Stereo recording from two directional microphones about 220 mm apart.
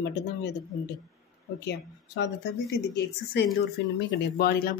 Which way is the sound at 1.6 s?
50° left (ahead or behind).